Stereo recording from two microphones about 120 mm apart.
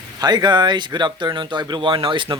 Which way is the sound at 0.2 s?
35° right (ahead or behind).